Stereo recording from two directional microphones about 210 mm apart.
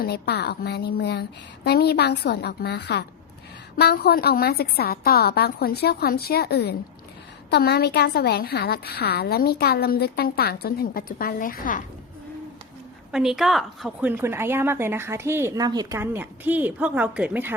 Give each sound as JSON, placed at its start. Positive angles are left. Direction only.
{"t": 0.0, "sound": "a woman's voice", "side_deg": 50}
{"t": 13.1, "sound": "a woman's voice", "side_deg": -5}